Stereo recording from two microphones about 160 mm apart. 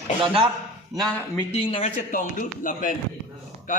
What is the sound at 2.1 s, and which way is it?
Speech, 55° left (ahead or behind).